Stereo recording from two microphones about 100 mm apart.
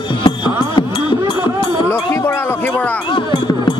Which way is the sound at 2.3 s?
20° left (ahead or behind).